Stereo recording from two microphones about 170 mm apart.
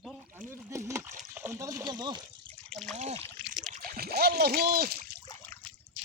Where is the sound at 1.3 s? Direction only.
15° right (ahead or behind).